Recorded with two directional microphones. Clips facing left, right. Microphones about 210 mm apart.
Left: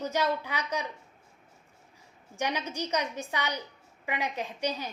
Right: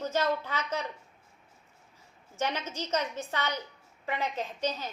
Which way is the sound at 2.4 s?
15° left (ahead or behind).